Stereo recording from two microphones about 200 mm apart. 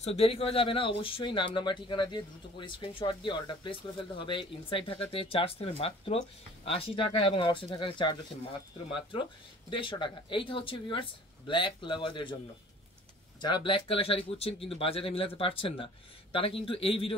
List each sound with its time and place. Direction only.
0.0 s speech: 30° left (ahead or behind)
9.7 s speech: 25° left (ahead or behind)
13.4 s speech: 25° left (ahead or behind)